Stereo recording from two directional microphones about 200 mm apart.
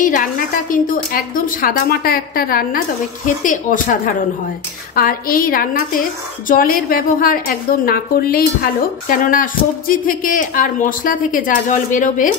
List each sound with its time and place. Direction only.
0.0 s a woman's voice: 40° left (ahead or behind)